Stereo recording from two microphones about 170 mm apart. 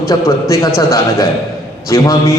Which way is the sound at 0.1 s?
15° left (ahead or behind).